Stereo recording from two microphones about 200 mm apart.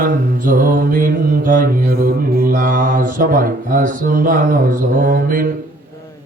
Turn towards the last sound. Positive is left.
turn(degrees=-45)  # may be behind; listen again after turning